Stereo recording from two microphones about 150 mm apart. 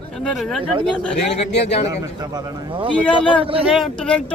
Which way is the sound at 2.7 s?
35° right (ahead or behind).